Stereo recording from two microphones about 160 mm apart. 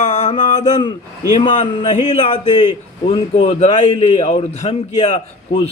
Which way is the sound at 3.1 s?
45° left (ahead or behind).